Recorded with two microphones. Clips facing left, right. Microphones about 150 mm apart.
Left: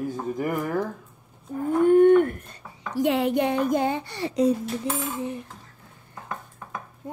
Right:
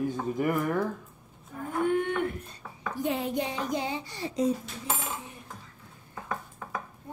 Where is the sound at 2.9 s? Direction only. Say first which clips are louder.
Left 8 dB; 75° left (ahead or behind).